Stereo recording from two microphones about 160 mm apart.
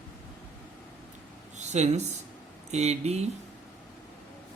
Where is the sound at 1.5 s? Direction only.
45° right (ahead or behind).